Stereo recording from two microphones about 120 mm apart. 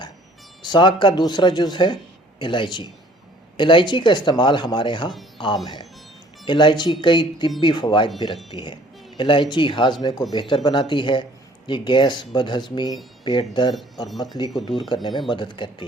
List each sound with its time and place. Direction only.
0.6 s speech: 40° left (ahead or behind)
6.4 s speech: 40° left (ahead or behind)
14.8 s speech: 40° left (ahead or behind)